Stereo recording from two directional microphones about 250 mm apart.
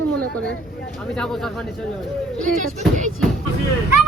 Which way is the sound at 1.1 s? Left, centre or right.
Centre.